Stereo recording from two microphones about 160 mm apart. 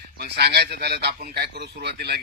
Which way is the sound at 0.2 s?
90° right.